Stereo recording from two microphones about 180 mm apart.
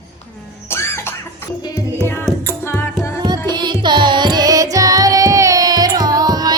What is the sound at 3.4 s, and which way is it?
Music, 25° right (ahead or behind).